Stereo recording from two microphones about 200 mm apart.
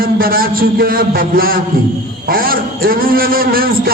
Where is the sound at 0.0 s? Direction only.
45° right (ahead or behind).